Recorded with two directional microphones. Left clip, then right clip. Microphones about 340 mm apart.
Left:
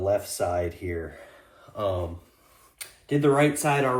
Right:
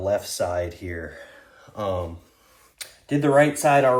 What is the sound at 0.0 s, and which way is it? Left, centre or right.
Speech, right.